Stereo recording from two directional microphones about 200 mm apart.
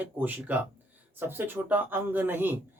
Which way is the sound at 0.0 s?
10° right (ahead or behind).